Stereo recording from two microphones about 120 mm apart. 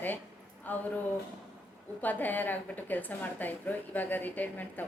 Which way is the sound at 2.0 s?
15° left (ahead or behind).